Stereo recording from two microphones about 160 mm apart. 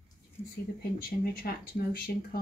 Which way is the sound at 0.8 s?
70° left (ahead or behind).